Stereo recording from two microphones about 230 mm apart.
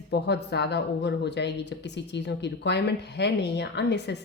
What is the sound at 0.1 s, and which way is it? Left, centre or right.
Speech, left.